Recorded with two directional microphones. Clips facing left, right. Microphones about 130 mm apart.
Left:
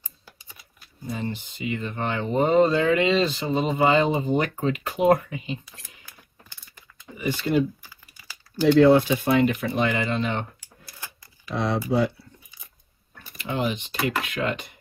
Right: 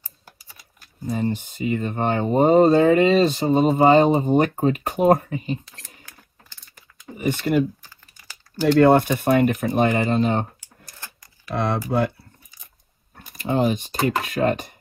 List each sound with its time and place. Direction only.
1.1 s speech: 45° right (ahead or behind)
7.2 s speech: 50° right (ahead or behind)
8.7 s speech: 55° right (ahead or behind)
11.5 s speech: 55° right (ahead or behind)
13.4 s speech: 40° right (ahead or behind)